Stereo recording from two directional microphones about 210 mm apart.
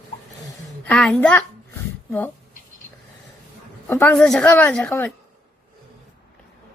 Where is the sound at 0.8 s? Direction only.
5° left (ahead or behind).